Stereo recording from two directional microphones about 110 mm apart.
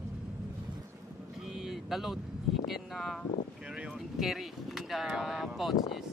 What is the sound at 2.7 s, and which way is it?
Speech, centre (ahead or behind).